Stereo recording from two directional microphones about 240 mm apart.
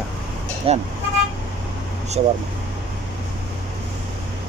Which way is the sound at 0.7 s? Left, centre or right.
Right.